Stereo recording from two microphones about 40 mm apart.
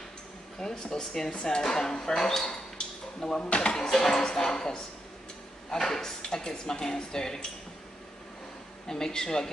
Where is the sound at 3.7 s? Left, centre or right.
Centre.